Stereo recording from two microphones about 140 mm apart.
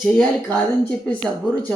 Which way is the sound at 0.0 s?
5° left (ahead or behind).